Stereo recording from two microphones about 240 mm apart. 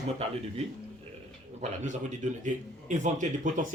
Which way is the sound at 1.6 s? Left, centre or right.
Right.